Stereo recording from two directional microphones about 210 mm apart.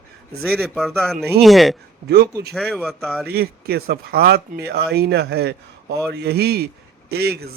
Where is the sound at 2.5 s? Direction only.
Centre (ahead or behind).